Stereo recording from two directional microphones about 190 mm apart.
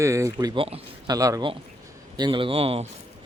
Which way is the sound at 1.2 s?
15° right (ahead or behind).